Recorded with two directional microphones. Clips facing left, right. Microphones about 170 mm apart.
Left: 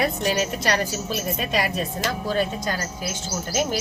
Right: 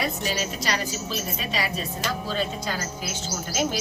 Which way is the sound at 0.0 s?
55° left (ahead or behind).